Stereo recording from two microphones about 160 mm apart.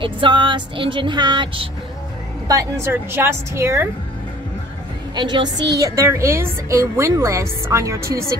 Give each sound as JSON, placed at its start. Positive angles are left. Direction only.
{"t": 0.0, "sound": "speech", "side_deg": -30}
{"t": 2.4, "sound": "a woman's voice", "side_deg": -20}
{"t": 5.1, "sound": "a woman's voice", "side_deg": -25}